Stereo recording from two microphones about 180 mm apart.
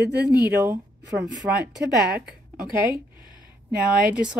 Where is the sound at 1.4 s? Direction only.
10° right (ahead or behind).